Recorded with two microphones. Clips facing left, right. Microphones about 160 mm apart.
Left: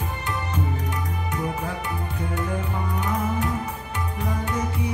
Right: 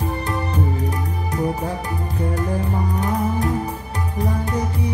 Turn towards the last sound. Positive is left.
turn(degrees=-35)  # may be behind; listen again after turning